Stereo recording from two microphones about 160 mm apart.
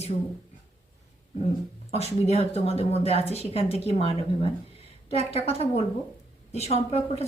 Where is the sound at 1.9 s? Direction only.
40° left (ahead or behind).